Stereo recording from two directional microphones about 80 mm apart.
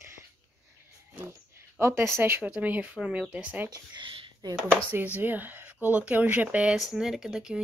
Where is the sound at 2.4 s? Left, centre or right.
Centre.